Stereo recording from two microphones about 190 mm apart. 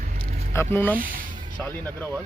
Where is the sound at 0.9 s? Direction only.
45° right (ahead or behind).